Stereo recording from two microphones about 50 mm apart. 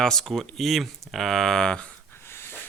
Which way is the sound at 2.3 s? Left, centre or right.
Left.